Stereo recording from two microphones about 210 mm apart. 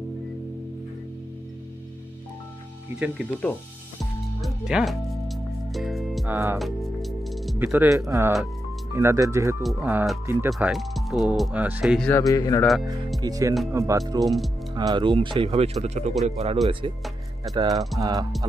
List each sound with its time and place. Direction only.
3.4 s speech: 10° left (ahead or behind)
4.4 s music: centre (ahead or behind)
6.3 s speech: 10° right (ahead or behind)
6.6 s music: centre (ahead or behind)
7.5 s speech: 10° right (ahead or behind)
12.1 s speech: 15° left (ahead or behind)
13.2 s speech: 15° right (ahead or behind)
14.2 s speech: centre (ahead or behind)
14.8 s speech: 20° right (ahead or behind)